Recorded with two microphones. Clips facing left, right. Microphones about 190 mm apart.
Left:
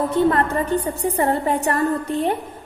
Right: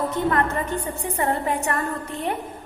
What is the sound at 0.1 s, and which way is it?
A woman's voice, 30° left (ahead or behind).